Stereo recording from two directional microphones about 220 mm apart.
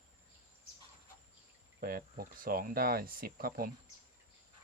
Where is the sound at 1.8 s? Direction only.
40° right (ahead or behind).